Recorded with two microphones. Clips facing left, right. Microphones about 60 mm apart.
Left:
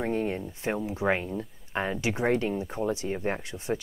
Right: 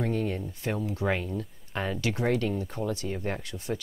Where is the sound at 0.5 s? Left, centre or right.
Left.